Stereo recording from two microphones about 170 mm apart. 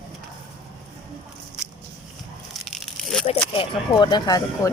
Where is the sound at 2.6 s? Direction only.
Centre (ahead or behind).